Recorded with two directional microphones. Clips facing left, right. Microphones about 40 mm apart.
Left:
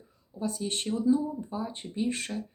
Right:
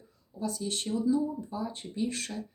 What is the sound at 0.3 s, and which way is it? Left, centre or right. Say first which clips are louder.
Speech: left 1 dB; left.